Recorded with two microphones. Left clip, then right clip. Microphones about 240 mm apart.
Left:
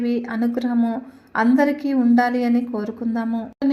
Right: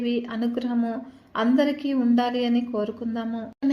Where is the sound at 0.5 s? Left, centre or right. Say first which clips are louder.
Left 4 dB; centre.